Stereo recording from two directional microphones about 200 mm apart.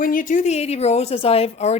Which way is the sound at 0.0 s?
45° left (ahead or behind).